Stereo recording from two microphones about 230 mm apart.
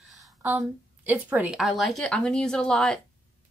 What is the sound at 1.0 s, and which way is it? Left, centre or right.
Speech, centre.